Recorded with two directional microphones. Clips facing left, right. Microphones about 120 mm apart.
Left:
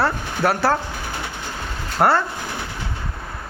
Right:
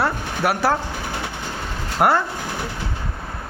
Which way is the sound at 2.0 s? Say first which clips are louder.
Even; 15° right (ahead or behind).